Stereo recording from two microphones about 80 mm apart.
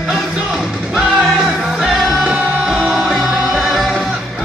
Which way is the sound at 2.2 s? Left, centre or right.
Centre.